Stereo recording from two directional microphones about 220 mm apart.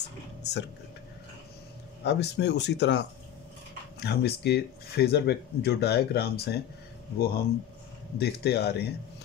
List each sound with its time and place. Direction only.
0.4 s speech: 50° left (ahead or behind)
2.0 s speech: 50° left (ahead or behind)